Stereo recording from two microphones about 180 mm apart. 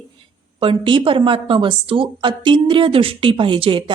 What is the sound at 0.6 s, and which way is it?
Speech, 30° right (ahead or behind).